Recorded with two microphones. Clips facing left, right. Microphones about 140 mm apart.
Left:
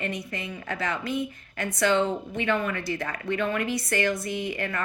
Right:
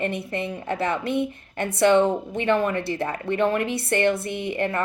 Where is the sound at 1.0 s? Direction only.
65° right (ahead or behind).